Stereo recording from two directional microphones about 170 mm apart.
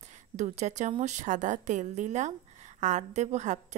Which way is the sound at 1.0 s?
45° right (ahead or behind).